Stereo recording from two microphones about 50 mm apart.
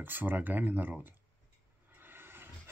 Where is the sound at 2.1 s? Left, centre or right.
Right.